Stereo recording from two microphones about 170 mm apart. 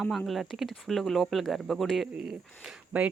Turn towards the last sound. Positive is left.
turn(degrees=-5)  # may be behind; listen again after turning